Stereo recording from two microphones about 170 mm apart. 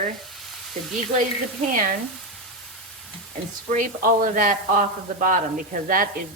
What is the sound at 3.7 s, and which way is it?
Speech, 50° right (ahead or behind).